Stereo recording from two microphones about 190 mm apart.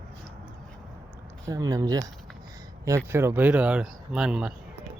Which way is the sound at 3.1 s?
15° right (ahead or behind).